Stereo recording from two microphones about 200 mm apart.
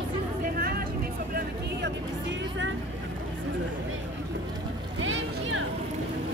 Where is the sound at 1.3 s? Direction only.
60° right (ahead or behind).